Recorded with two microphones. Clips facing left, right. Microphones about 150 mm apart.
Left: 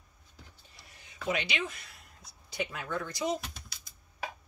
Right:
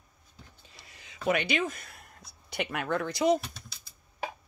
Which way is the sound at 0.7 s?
90° right.